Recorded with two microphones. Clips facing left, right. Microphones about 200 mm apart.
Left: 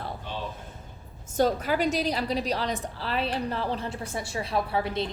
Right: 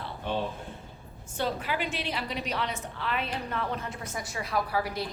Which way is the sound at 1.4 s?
40° left (ahead or behind).